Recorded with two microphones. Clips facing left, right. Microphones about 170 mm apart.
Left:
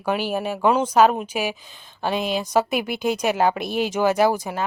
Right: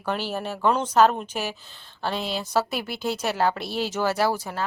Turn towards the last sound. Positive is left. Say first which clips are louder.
# left 5 dB
turn(degrees=15)  # may be behind; listen again after turning